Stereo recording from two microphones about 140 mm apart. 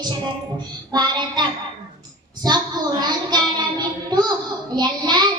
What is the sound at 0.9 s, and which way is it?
Child singing, 30° right (ahead or behind).